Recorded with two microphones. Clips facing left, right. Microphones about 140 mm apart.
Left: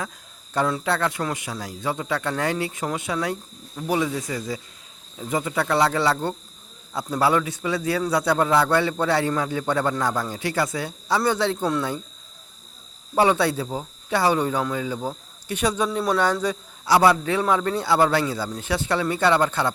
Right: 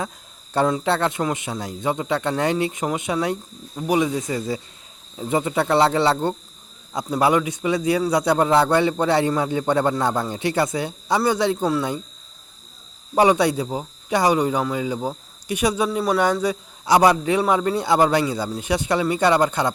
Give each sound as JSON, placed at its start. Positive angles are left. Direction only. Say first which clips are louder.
{"t": 0.5, "sound": "a man's voice", "louder": "right 3 dB", "side_deg": -30}
{"t": 13.1, "sound": "speech", "louder": "right 3 dB", "side_deg": -15}